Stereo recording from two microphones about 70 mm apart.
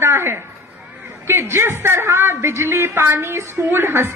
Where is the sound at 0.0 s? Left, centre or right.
Right.